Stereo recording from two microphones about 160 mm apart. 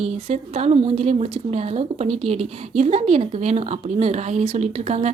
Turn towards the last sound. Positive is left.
turn(degrees=-45)  # may be behind; listen again after turning